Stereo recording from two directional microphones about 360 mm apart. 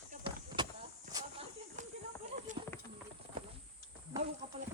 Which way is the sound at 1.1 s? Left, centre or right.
Centre.